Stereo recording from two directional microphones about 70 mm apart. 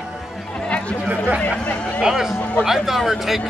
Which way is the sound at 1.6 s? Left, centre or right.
Centre.